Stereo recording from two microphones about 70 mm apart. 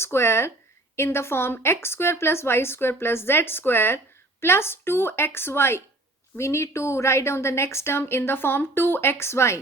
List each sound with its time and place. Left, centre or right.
0.0 s speech: left